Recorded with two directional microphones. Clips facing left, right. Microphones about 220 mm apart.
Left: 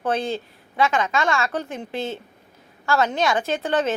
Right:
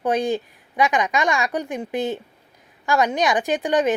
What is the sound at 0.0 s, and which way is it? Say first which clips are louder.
A woman's voice: right 3 dB; 15° right (ahead or behind).